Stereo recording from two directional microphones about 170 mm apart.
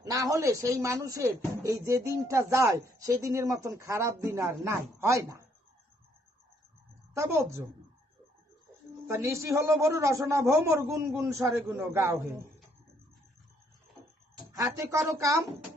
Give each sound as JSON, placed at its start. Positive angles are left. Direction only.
{"t": 0.0, "sound": "a man's voice", "side_deg": -20}
{"t": 7.1, "sound": "a man's voice", "side_deg": -15}
{"t": 9.0, "sound": "a man's voice", "side_deg": -15}
{"t": 14.6, "sound": "speech", "side_deg": -20}